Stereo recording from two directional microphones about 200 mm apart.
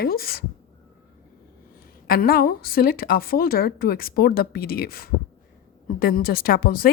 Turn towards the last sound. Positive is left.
turn(degrees=45)  # may be behind; listen again after turning